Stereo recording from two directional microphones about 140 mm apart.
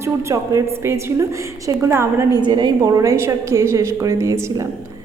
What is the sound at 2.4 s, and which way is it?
A woman's voice, 35° right (ahead or behind).